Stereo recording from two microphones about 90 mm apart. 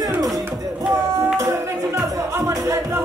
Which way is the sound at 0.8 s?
40° right (ahead or behind).